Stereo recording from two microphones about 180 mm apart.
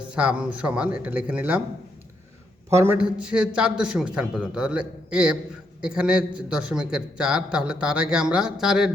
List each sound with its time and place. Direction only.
0.1 s speech: 5° right (ahead or behind)
2.6 s a man's voice: 15° right (ahead or behind)